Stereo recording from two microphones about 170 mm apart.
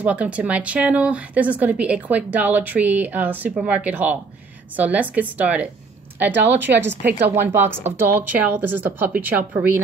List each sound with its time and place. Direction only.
0.0 s speech: 10° right (ahead or behind)
6.6 s a woman's voice: 90° right
7.0 s speech: 10° right (ahead or behind)